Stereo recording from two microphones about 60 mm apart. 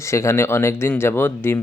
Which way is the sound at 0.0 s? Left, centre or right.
Left.